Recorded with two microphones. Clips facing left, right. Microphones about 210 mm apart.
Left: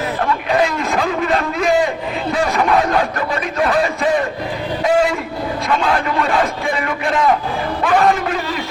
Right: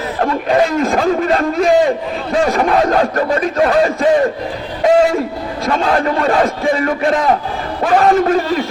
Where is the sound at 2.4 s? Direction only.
40° right (ahead or behind).